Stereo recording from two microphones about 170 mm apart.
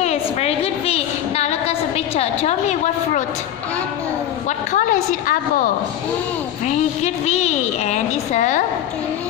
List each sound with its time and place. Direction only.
0.0 s a sound: 40° left (ahead or behind)
4.7 s a woman's voice: 50° left (ahead or behind)
7.2 s a child's voice: 40° left (ahead or behind)